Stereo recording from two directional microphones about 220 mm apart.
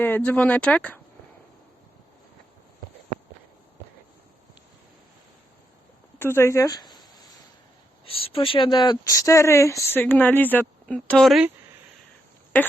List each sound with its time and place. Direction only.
0.3 s speech: 5° left (ahead or behind)
6.1 s a sound: 10° left (ahead or behind)
8.0 s speech: 25° left (ahead or behind); by 11.5 s centre (ahead or behind)